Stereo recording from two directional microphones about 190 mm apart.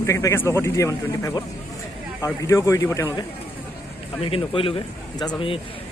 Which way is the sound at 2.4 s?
15° left (ahead or behind).